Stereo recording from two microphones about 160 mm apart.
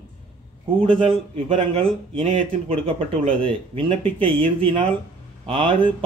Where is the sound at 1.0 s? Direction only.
35° right (ahead or behind).